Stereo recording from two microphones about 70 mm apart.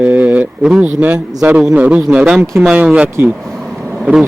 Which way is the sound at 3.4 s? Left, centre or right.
Centre.